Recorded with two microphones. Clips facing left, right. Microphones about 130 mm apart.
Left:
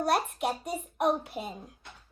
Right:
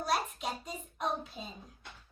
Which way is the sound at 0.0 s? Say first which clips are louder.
Left 6 dB; 60° left (ahead or behind).